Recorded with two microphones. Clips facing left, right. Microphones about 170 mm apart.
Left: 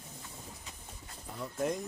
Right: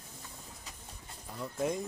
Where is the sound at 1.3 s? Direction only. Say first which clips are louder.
Even; centre (ahead or behind).